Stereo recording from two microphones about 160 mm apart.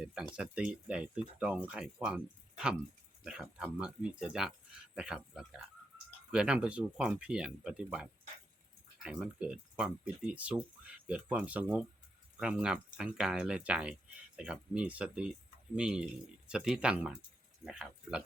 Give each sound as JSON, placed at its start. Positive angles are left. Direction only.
{"t": 0.3, "sound": "speech", "side_deg": -5}